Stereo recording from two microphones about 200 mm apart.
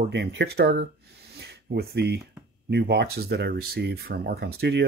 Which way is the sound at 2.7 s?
55° right (ahead or behind).